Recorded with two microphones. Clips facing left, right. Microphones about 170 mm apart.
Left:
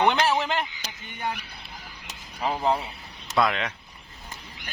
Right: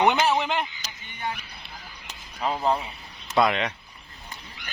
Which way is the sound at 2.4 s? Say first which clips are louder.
Even; 5° left (ahead or behind).